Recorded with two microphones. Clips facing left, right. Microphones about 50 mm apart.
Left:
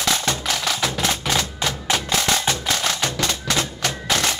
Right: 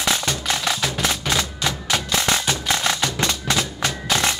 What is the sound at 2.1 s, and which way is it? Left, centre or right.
Music, right.